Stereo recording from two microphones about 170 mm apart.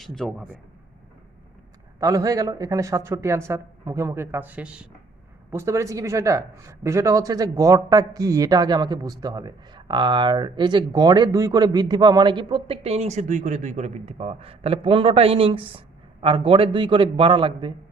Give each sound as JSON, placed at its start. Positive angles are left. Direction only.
{"t": 0.0, "sound": "a man's voice", "side_deg": 0}
{"t": 2.0, "sound": "a man's voice", "side_deg": -20}